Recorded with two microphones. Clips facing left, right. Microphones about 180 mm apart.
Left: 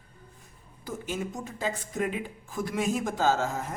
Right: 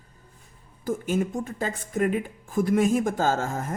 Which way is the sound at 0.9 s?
50° right (ahead or behind).